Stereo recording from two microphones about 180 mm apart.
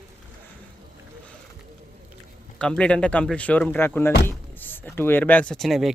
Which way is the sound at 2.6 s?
5° left (ahead or behind).